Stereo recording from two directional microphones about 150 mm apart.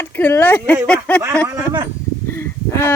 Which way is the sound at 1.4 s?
30° right (ahead or behind).